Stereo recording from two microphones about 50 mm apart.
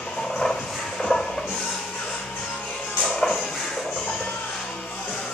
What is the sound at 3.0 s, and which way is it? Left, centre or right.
Music, centre.